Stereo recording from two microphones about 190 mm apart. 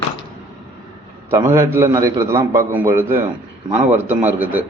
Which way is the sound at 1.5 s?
15° right (ahead or behind).